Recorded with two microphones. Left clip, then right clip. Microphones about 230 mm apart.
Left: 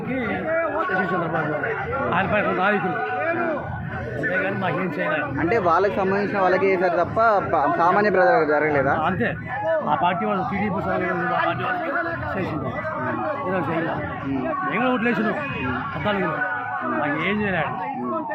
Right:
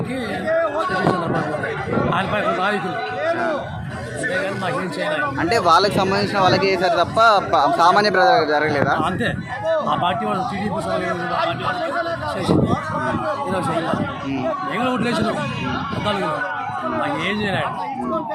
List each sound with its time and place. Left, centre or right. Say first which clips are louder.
2.1 s speech: left 2 dB; centre
5.1 s speech: right 4 dB; centre
14.8 s speech: left 1 dB; centre
17.0 s speech: right 1 dB; centre